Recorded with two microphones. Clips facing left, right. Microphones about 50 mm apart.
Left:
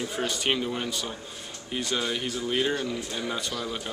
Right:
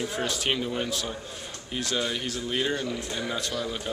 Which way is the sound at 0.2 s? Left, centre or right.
Centre.